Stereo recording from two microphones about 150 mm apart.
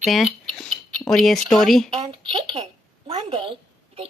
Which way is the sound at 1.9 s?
30° right (ahead or behind).